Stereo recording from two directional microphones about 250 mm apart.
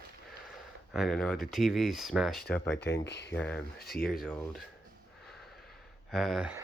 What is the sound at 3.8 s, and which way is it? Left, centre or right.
Speech, left.